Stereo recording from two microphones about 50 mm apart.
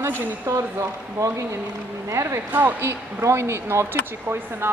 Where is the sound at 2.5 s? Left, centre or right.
Right.